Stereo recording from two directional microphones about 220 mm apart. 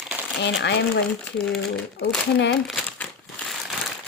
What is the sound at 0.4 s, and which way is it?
Speech, 50° left (ahead or behind).